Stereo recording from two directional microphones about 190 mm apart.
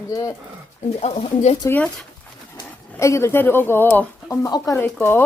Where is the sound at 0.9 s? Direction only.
30° left (ahead or behind).